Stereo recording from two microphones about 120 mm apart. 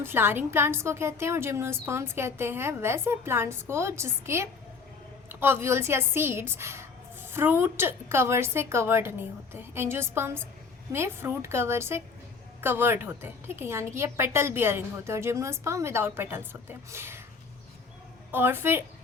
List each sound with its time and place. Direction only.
0.0 s a woman's voice: 20° right (ahead or behind)
18.3 s a woman's voice: 20° right (ahead or behind)